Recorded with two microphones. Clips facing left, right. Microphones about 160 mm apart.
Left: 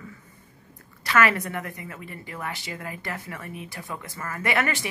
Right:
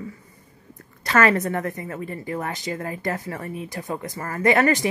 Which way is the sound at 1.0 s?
45° right (ahead or behind).